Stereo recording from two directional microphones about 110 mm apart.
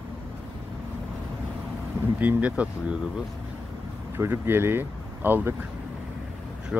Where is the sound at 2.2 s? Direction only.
15° right (ahead or behind).